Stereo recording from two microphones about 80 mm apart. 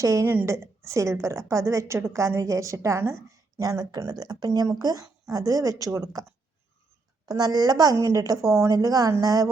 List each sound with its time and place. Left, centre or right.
0.0 s a woman's voice: right
3.2 s speech: right
7.3 s a woman's voice: right